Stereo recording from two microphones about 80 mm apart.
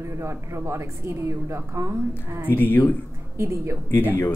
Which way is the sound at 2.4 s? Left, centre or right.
Left.